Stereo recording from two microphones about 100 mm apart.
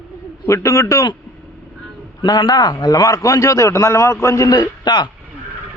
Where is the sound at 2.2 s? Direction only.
45° left (ahead or behind).